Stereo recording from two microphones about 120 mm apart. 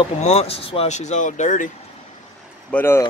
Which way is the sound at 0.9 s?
75° left (ahead or behind).